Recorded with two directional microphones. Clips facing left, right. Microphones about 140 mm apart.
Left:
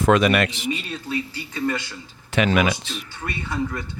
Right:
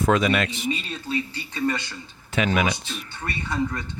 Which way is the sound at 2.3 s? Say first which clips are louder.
Left 3 dB; 80° left.